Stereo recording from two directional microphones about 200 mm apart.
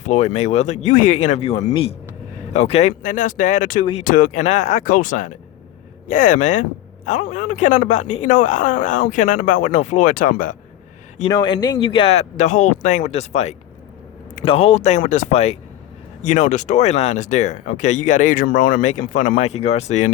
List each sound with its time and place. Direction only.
0.0 s speech: 35° left (ahead or behind)
11.3 s speech: 20° left (ahead or behind)